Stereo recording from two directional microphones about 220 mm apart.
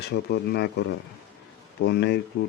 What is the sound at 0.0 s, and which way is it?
Speech, 50° left (ahead or behind).